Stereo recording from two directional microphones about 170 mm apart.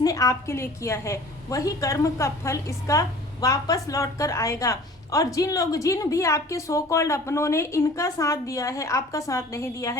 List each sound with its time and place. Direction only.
0.0 s a woman's voice: 20° left (ahead or behind)